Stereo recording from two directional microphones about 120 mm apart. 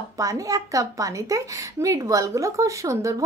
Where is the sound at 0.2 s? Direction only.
30° right (ahead or behind).